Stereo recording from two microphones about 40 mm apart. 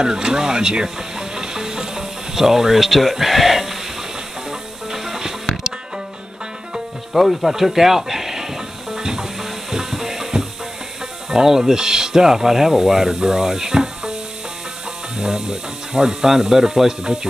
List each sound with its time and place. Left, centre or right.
0.0 s speech: centre
4.5 s music: centre
7.2 s speech: centre
8.9 s music: centre
11.2 s speech: centre
15.1 s speech: centre